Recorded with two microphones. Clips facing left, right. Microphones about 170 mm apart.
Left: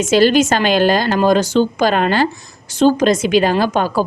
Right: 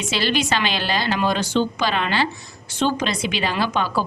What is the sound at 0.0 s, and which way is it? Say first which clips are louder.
Speech: left 11 dB; 45° left (ahead or behind).